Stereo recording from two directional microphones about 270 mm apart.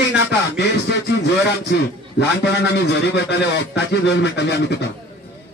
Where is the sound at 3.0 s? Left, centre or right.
Left.